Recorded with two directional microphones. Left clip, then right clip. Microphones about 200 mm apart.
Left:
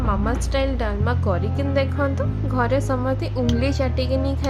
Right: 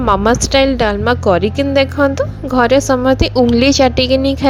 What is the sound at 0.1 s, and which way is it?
A woman's voice, 35° right (ahead or behind).